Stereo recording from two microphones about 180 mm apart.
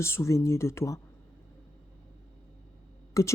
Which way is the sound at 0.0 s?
15° left (ahead or behind).